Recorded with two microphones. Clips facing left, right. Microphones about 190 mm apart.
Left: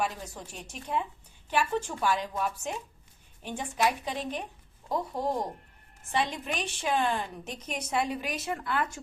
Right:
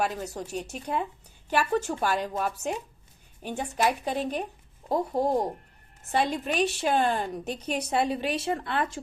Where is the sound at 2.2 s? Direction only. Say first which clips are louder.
Right 3 dB; 55° right (ahead or behind).